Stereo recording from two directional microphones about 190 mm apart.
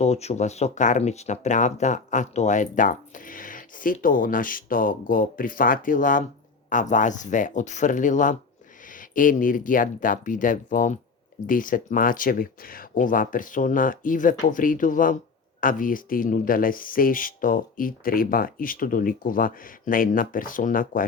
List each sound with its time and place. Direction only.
0.0 s speech: 35° left (ahead or behind)